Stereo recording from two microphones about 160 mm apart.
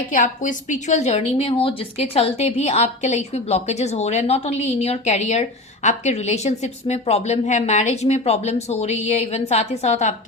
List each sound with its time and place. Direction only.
0.1 s a woman's voice: 55° left (ahead or behind)